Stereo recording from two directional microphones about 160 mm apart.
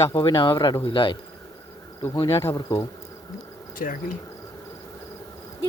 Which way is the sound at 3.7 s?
60° left (ahead or behind).